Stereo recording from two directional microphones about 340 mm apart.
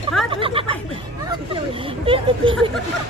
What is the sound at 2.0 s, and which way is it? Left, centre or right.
Speech, centre.